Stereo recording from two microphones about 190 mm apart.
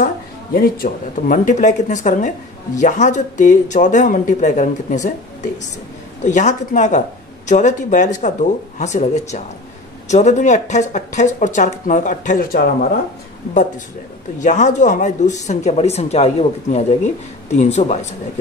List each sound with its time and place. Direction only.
0.6 s speech: 45° left (ahead or behind)
14.4 s speech: 40° left (ahead or behind)